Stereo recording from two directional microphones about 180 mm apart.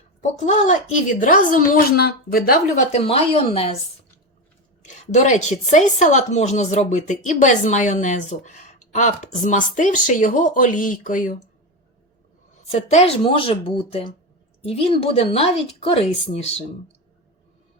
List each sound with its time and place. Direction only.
0.2 s a woman's voice: 40° left (ahead or behind)
2.9 s a woman's voice: 35° left (ahead or behind)
4.8 s a woman's voice: 40° left (ahead or behind)
12.9 s a woman's voice: 35° left (ahead or behind)